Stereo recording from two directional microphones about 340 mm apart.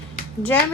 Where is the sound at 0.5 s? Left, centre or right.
Centre.